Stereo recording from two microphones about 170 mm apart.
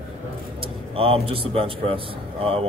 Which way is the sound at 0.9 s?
35° right (ahead or behind).